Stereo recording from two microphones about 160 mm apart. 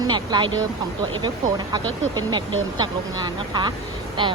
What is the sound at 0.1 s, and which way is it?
Speech, 30° right (ahead or behind).